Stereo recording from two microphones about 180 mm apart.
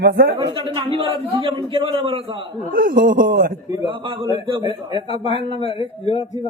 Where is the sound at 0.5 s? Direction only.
30° right (ahead or behind).